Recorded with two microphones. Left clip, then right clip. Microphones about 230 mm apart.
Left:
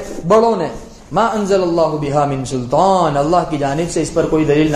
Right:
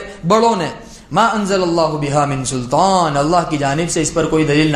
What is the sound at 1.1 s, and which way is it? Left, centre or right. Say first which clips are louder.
A man's voice: even; right.